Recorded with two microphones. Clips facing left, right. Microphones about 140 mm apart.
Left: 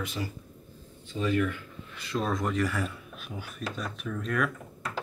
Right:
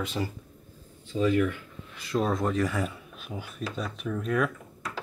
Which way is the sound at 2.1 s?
15° right (ahead or behind).